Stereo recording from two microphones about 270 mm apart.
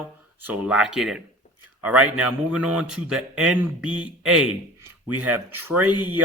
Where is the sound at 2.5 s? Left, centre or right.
Centre.